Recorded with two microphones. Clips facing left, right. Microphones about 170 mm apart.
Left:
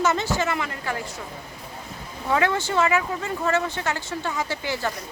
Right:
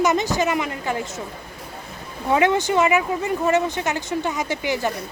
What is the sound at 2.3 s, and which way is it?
Speech, 20° right (ahead or behind).